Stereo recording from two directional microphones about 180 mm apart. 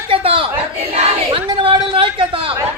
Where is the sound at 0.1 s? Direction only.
30° right (ahead or behind).